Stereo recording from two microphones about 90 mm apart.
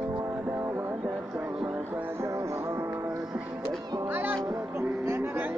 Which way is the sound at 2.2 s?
35° right (ahead or behind).